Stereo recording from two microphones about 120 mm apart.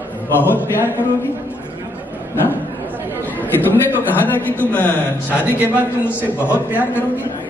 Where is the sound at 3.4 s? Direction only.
15° left (ahead or behind).